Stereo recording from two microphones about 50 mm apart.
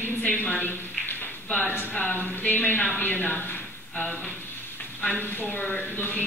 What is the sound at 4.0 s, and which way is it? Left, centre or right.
Speech, left.